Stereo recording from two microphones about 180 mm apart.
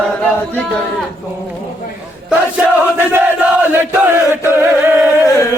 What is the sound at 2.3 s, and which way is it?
Crowd, 10° right (ahead or behind).